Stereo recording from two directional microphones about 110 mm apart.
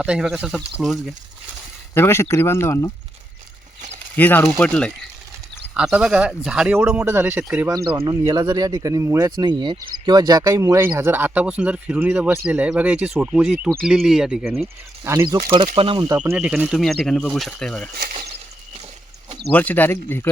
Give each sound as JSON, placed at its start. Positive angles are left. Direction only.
{"t": 0.0, "sound": "speech", "side_deg": -10}
{"t": 2.0, "sound": "speech", "side_deg": 20}
{"t": 4.2, "sound": "speech", "side_deg": 15}
{"t": 5.7, "sound": "speech", "side_deg": -5}
{"t": 7.0, "sound": "speech", "side_deg": -25}
{"t": 8.0, "sound": "speech", "side_deg": -40}
{"t": 15.0, "sound": "speech", "side_deg": -25}
{"t": 15.3, "sound": "speech", "side_deg": -35}
{"t": 16.1, "sound": "speech", "side_deg": -15}
{"t": 19.5, "sound": "speech", "side_deg": 15}